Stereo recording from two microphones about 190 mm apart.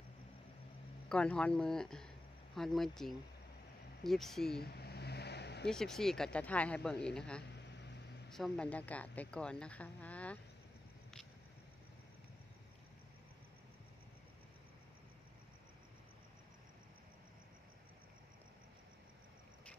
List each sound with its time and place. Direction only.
1.0 s speech: 5° left (ahead or behind)
4.6 s vehicle: 55° left (ahead or behind)
5.7 s speech: centre (ahead or behind)
7.5 s a sound: 65° left (ahead or behind)
8.3 s a woman's voice: 5° left (ahead or behind)